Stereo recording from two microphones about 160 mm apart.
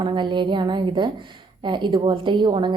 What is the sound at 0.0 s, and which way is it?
A woman's voice, 30° right (ahead or behind).